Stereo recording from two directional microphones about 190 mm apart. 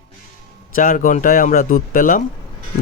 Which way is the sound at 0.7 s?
45° left (ahead or behind).